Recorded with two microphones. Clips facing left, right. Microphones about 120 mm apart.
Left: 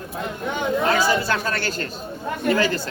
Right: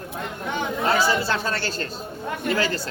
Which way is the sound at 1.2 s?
25° right (ahead or behind).